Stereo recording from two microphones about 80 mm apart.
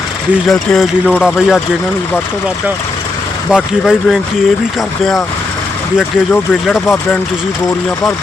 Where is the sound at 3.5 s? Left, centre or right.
Centre.